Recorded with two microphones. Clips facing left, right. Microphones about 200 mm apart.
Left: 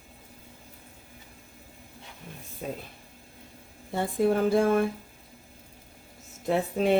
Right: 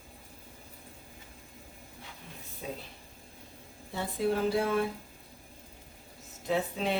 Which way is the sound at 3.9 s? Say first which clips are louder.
Left 5 dB; 50° left (ahead or behind).